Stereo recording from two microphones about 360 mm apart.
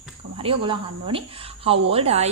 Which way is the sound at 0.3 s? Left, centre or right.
Centre.